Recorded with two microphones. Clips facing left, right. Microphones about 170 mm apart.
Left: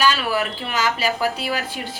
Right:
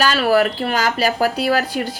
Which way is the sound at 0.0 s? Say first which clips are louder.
Right 5 dB; 45° right (ahead or behind).